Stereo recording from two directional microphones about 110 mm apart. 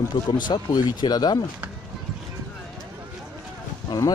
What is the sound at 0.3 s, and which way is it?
Speech, 40° left (ahead or behind).